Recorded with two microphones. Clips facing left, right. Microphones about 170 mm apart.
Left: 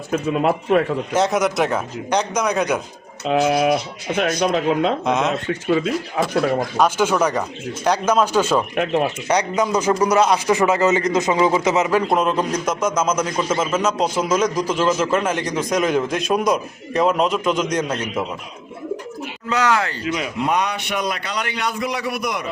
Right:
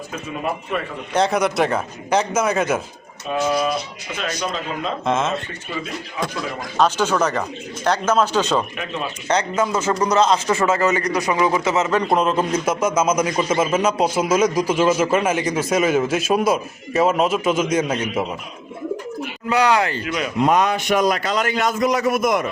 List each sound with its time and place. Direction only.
0.1 s a man's voice: 80° left
1.1 s a man's voice: centre (ahead or behind)
3.2 s speech: 70° left (ahead or behind)
5.0 s a man's voice: centre (ahead or behind)
5.5 s a man's voice: 80° left
6.2 s speech: 55° left (ahead or behind)
6.7 s speech: 10° left (ahead or behind)
8.7 s speech: 65° left (ahead or behind)
9.2 s a man's voice: 15° left (ahead or behind); by 18.3 s 10° right (ahead or behind)
19.5 s speech: 15° right (ahead or behind)
20.1 s a man's voice: 20° left (ahead or behind)
20.4 s a man's voice: 45° right (ahead or behind)